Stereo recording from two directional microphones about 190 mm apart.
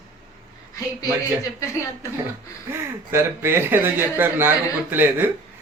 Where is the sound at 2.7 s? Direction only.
10° right (ahead or behind).